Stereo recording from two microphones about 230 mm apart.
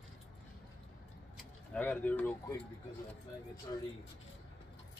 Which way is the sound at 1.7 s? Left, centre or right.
Centre.